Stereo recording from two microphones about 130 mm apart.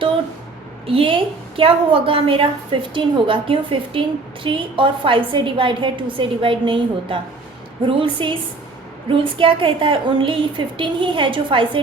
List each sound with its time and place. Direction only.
0.9 s a woman's voice: 45° right (ahead or behind)